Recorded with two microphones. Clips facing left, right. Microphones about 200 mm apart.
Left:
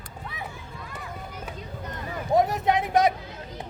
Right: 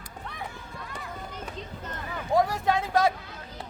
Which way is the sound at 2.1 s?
20° left (ahead or behind).